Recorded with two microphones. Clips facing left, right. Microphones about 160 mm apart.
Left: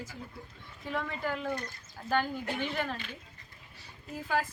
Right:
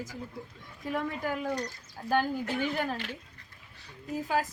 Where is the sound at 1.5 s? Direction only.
55° left (ahead or behind).